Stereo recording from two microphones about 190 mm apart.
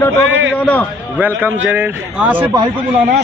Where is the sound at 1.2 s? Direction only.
10° right (ahead or behind).